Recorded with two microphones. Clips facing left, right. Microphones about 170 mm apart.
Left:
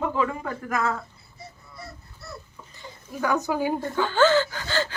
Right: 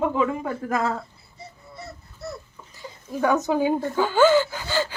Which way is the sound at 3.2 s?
25° right (ahead or behind).